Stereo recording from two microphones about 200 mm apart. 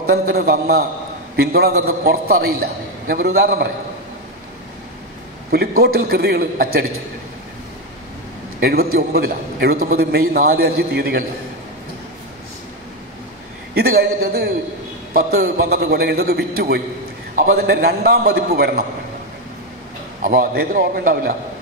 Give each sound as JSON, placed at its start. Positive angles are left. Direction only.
{"t": 0.1, "sound": "a man's voice", "side_deg": -50}
{"t": 5.5, "sound": "a man's voice", "side_deg": -50}
{"t": 8.5, "sound": "a man's voice", "side_deg": -50}
{"t": 13.7, "sound": "a man's voice", "side_deg": -50}
{"t": 20.2, "sound": "a man's voice", "side_deg": -45}